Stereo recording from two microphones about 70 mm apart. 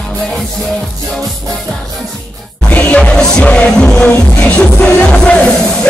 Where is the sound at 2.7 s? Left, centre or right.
Left.